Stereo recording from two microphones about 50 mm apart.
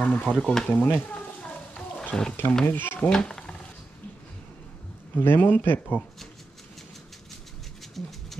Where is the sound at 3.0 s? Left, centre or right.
Centre.